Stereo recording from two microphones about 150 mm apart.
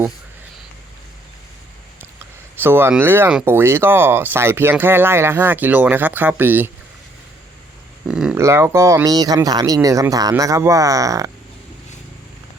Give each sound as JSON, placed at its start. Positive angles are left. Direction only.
{"t": 2.6, "sound": "speech", "side_deg": -15}
{"t": 8.0, "sound": "a sound", "side_deg": -5}
{"t": 8.4, "sound": "speech", "side_deg": -20}